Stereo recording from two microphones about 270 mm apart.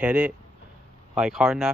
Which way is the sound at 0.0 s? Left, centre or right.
Centre.